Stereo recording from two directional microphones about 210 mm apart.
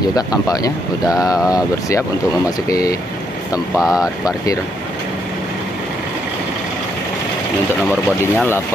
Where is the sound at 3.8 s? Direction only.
5° right (ahead or behind).